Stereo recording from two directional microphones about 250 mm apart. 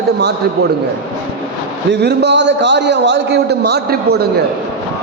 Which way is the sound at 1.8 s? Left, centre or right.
Right.